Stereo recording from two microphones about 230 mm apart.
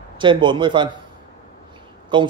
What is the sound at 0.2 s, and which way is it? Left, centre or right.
Speech, right.